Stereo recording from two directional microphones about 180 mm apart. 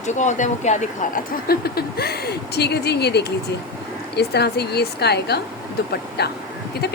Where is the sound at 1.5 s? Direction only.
60° left (ahead or behind).